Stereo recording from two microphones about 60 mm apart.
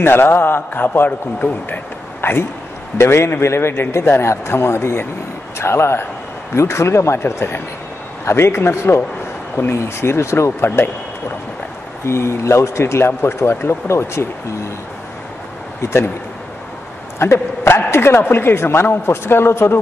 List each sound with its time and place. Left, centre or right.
0.0 s a man's voice: left
12.1 s speech: left
15.8 s speech: left
17.2 s a man's voice: left